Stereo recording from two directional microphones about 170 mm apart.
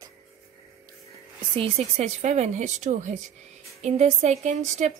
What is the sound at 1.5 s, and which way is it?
Speech, 35° right (ahead or behind).